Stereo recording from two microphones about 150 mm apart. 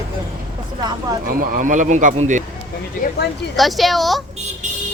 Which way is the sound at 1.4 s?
65° right (ahead or behind).